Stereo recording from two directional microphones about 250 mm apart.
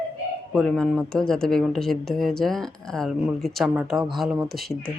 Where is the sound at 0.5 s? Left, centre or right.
Centre.